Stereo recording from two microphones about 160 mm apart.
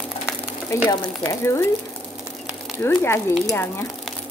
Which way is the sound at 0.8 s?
25° left (ahead or behind).